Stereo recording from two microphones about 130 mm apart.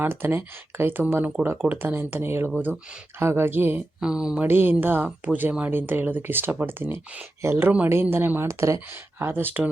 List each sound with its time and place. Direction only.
0.0 s speech: 15° right (ahead or behind)
4.4 s speech: 15° right (ahead or behind)